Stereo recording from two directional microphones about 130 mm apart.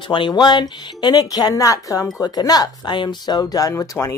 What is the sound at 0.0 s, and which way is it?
Speech, 40° left (ahead or behind).